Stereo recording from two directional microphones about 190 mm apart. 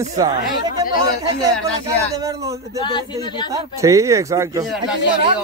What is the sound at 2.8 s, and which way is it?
Speech, 25° left (ahead or behind).